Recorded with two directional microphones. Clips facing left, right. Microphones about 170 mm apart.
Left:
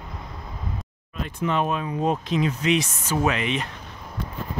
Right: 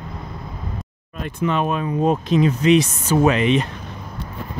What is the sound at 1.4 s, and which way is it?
Speech, 90° right.